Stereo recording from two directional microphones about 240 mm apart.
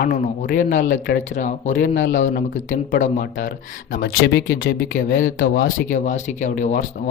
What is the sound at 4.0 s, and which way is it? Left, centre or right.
Speech, left.